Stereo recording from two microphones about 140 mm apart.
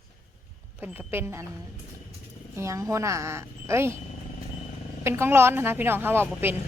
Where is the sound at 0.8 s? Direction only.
15° right (ahead or behind).